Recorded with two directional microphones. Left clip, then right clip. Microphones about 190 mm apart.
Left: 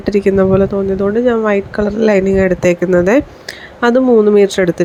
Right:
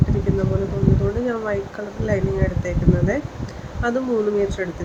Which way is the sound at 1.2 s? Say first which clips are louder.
Left 11 dB; 40° left (ahead or behind).